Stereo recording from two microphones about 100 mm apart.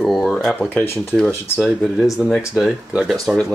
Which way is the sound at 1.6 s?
5° right (ahead or behind).